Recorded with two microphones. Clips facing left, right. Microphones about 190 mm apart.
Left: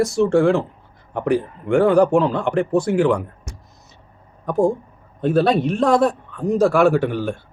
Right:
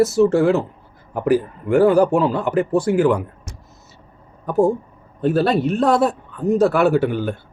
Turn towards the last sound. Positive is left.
turn(degrees=-5)  # may be behind; listen again after turning